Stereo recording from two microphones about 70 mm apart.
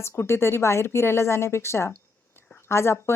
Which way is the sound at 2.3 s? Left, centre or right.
Left.